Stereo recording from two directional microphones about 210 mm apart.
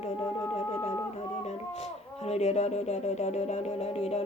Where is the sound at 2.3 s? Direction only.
30° left (ahead or behind).